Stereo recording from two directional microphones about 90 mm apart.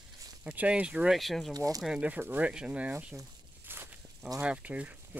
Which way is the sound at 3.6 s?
25° right (ahead or behind).